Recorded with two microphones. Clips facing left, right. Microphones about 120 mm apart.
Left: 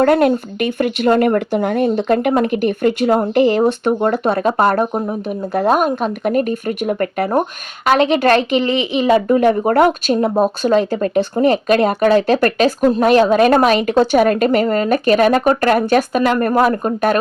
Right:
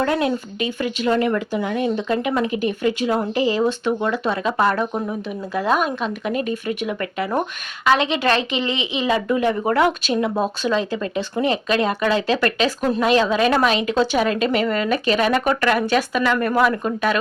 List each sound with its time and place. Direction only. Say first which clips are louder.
0.0 s speech: left 8 dB; 55° left (ahead or behind)